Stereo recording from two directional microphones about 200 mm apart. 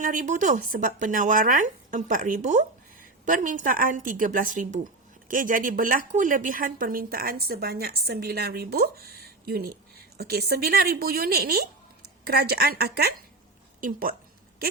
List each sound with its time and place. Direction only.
0.0 s a woman's voice: 40° right (ahead or behind)